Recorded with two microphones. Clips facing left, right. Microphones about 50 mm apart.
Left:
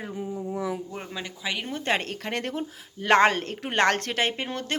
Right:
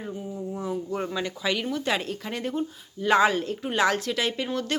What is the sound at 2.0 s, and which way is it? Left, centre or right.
Speech, left.